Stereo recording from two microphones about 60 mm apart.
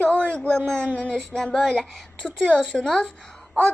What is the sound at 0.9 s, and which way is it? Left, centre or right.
A child's voice, left.